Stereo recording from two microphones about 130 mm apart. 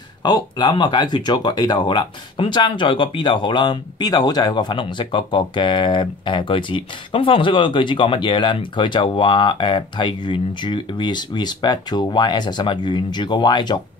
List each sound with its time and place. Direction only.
0.2 s speech: 35° left (ahead or behind)